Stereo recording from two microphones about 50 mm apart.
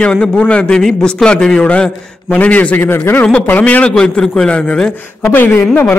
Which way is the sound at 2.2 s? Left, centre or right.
Left.